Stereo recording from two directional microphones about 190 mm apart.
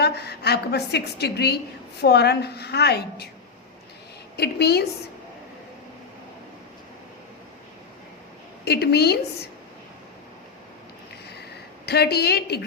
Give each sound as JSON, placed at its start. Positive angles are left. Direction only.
{"t": 0.0, "sound": "a woman's voice", "side_deg": 60}
{"t": 4.4, "sound": "a woman's voice", "side_deg": 60}
{"t": 8.6, "sound": "a woman's voice", "side_deg": 60}
{"t": 11.9, "sound": "a woman's voice", "side_deg": 60}